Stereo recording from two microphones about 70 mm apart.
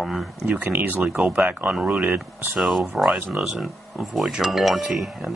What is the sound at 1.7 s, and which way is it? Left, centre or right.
Speech, centre.